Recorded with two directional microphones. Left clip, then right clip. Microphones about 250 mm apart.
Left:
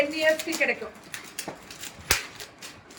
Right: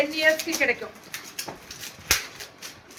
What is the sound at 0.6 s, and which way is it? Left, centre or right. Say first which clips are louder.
Speech: right 2 dB; centre.